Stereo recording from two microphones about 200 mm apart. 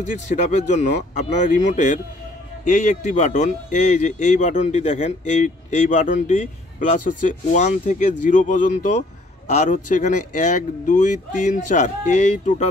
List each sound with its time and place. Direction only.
0.5 s speech: 35° left (ahead or behind)